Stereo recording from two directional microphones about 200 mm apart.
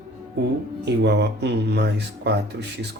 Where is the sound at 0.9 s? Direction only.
55° right (ahead or behind).